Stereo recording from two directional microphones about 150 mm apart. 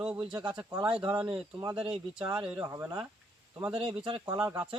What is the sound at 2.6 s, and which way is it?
Speech, 20° right (ahead or behind).